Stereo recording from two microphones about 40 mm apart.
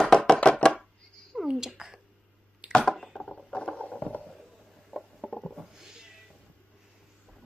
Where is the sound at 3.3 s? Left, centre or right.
Left.